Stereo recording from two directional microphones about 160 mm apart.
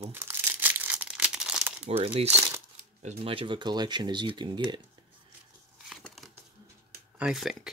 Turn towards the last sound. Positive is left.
turn(degrees=0)  # may be behind; listen again after turning